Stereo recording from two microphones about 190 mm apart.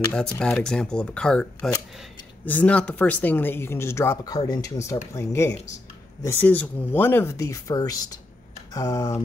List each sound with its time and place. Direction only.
0.1 s speech: 5° left (ahead or behind)